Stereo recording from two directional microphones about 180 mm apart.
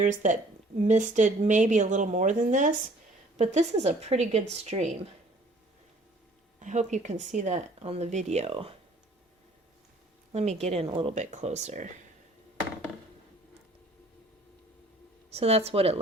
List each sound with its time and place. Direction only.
0.0 s speech: 45° right (ahead or behind)
6.6 s speech: 40° right (ahead or behind)
10.3 s speech: 40° right (ahead or behind)
15.3 s speech: 35° right (ahead or behind)